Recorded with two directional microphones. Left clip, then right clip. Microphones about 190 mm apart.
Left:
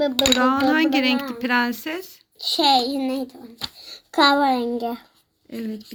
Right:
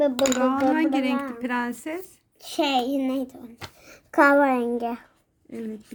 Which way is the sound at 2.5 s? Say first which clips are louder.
Left 6 dB; 20° right (ahead or behind).